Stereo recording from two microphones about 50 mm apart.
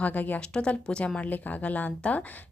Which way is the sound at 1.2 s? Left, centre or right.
Left.